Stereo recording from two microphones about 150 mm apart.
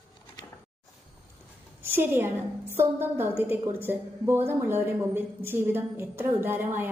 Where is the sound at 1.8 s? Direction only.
15° right (ahead or behind).